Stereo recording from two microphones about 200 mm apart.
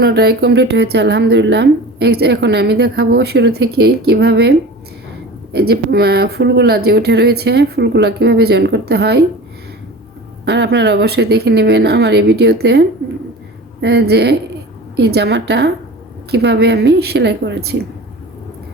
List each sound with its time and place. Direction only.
0.0 s a woman's voice: 50° right (ahead or behind)
10.4 s a woman's voice: 60° right (ahead or behind)
13.8 s a woman's voice: 55° right (ahead or behind)